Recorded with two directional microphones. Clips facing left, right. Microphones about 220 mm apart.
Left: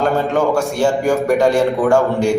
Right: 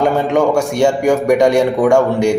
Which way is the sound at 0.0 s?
15° right (ahead or behind).